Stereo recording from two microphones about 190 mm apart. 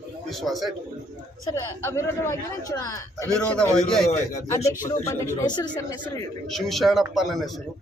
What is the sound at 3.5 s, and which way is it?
Speech, 5° left (ahead or behind).